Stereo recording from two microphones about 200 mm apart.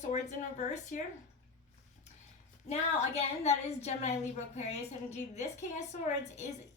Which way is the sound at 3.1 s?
35° left (ahead or behind).